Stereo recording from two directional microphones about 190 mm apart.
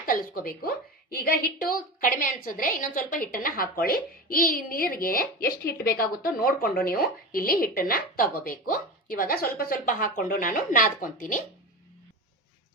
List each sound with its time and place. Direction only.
0.0 s a woman's voice: 50° left (ahead or behind)